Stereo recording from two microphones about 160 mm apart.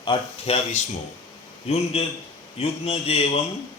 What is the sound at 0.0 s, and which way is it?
A man's voice, 35° left (ahead or behind).